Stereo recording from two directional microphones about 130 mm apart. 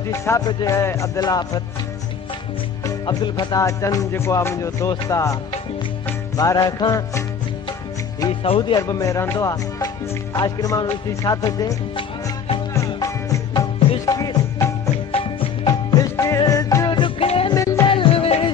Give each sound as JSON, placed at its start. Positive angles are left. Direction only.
{"t": 0.1, "sound": "music", "side_deg": 20}
{"t": 2.8, "sound": "music", "side_deg": 30}
{"t": 8.3, "sound": "music", "side_deg": 45}
{"t": 12.7, "sound": "music", "side_deg": 25}
{"t": 17.2, "sound": "music", "side_deg": 45}
{"t": 17.6, "sound": "music", "side_deg": 25}
{"t": 17.9, "sound": "music", "side_deg": 45}